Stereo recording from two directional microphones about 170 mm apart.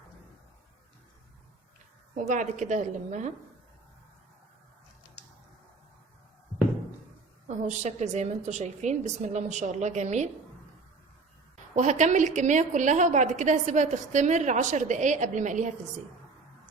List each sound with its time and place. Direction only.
2.1 s a woman's voice: 50° right (ahead or behind)
7.4 s a woman's voice: 45° right (ahead or behind)
11.7 s a woman's voice: 45° right (ahead or behind)